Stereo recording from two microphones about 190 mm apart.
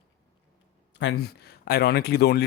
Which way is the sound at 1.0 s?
65° left (ahead or behind).